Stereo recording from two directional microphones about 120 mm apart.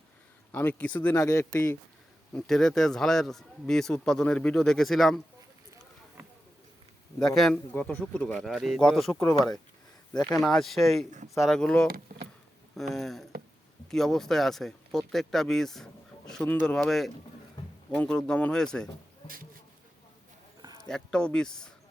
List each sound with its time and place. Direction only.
0.5 s speech: 15° left (ahead or behind)
1.2 s speech: 25° left (ahead or behind)
2.3 s speech: 5° left (ahead or behind)
7.2 s speech: centre (ahead or behind)
7.7 s speech: 15° left (ahead or behind)
8.4 s speech: centre (ahead or behind)
20.6 s a sound: 35° right (ahead or behind)
20.8 s speech: 5° left (ahead or behind)